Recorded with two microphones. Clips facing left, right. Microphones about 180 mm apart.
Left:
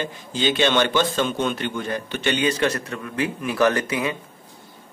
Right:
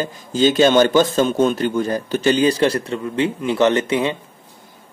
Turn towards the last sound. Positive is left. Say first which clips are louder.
# right 5 dB
turn(degrees=-30)  # may be behind; listen again after turning